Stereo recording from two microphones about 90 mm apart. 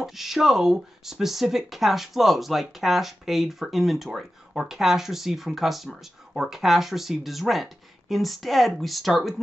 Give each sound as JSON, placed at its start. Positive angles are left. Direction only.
{"t": 0.0, "sound": "speech", "side_deg": 0}